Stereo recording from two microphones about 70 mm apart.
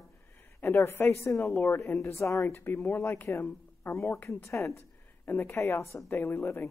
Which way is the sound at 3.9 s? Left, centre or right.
Left.